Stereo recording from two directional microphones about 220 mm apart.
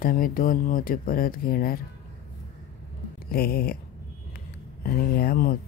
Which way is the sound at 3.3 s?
45° left (ahead or behind).